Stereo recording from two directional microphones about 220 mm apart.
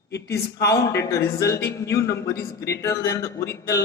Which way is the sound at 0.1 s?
50° left (ahead or behind).